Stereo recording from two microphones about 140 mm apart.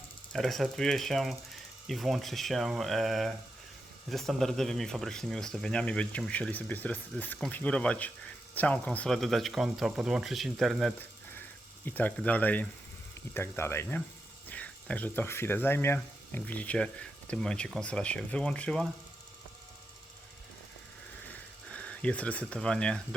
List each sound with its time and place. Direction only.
0.3 s a man's voice: centre (ahead or behind)
11.9 s speech: 10° left (ahead or behind)
21.7 s speech: 10° left (ahead or behind)